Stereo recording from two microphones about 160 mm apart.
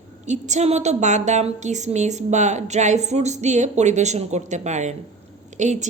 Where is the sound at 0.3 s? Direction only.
45° right (ahead or behind).